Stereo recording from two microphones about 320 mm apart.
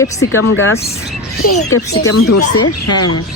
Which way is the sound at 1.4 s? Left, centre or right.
Left.